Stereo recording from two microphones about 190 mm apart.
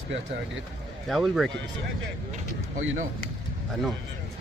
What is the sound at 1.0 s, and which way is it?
Speech, centre (ahead or behind).